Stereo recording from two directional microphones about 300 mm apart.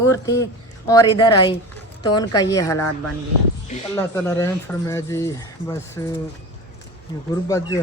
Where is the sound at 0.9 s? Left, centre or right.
Centre.